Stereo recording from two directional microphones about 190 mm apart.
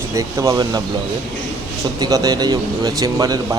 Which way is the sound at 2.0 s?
20° right (ahead or behind).